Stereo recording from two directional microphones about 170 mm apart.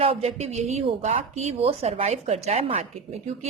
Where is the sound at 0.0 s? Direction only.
35° right (ahead or behind).